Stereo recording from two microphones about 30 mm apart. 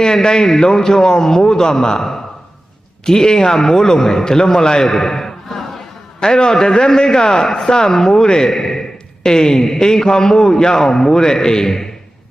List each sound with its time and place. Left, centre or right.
0.0 s a man's voice: left
4.8 s a sound: centre
6.1 s a man's voice: left